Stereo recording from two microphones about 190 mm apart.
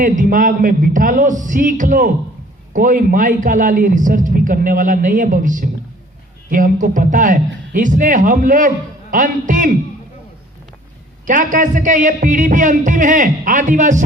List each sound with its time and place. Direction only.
0.0 s a man's voice: 45° right (ahead or behind)
11.3 s a man's voice: 45° right (ahead or behind)